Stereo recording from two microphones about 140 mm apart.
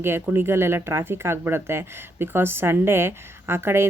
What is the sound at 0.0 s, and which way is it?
Speech, 15° right (ahead or behind).